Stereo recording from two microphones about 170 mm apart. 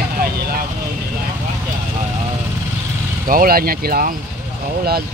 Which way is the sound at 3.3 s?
60° right (ahead or behind).